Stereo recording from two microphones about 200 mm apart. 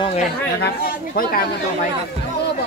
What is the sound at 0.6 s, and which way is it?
Speech, 50° left (ahead or behind).